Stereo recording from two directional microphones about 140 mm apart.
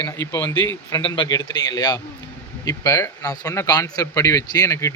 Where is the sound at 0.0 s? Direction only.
20° left (ahead or behind).